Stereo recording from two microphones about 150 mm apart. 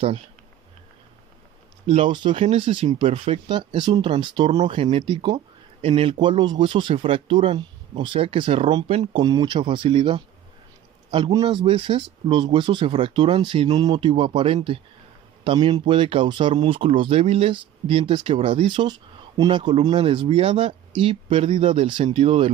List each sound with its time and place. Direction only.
1.9 s speech: 35° right (ahead or behind)
9.2 s speech: 30° right (ahead or behind)